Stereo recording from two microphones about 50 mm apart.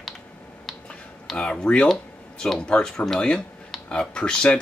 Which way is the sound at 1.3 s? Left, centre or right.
Centre.